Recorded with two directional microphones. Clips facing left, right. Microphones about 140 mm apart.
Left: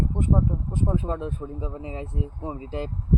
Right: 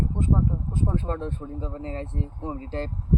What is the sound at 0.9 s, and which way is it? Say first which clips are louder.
Speech: left 1 dB; 10° left (ahead or behind).